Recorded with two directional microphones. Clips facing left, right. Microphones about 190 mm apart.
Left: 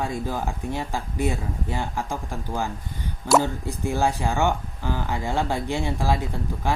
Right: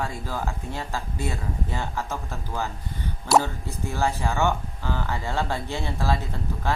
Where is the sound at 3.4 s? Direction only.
15° left (ahead or behind).